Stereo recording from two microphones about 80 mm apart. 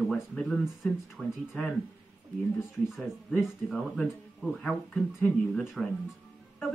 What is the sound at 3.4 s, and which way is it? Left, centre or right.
Speech, centre.